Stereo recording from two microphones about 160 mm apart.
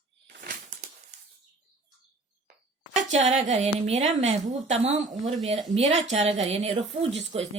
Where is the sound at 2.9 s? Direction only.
45° right (ahead or behind).